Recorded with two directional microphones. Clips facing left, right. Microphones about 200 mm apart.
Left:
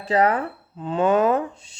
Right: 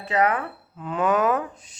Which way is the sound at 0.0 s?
30° left (ahead or behind).